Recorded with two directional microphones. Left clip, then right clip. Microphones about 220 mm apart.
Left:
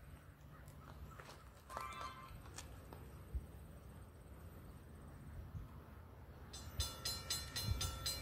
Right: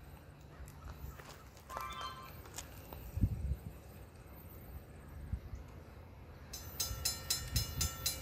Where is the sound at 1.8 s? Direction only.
25° right (ahead or behind).